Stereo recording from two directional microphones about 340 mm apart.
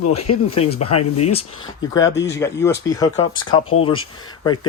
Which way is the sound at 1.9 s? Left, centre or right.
Centre.